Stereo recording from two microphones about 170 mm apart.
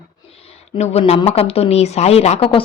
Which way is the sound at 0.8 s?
40° left (ahead or behind).